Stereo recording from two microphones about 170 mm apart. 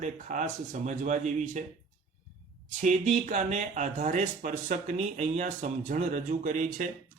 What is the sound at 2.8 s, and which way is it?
Speech, 45° right (ahead or behind).